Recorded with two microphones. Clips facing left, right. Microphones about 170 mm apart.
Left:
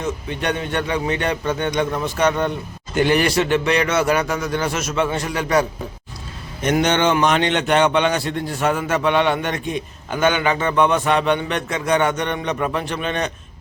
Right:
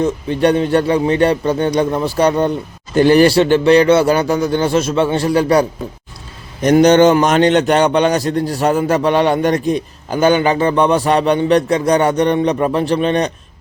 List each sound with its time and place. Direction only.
0.0 s a man's voice: 35° right (ahead or behind)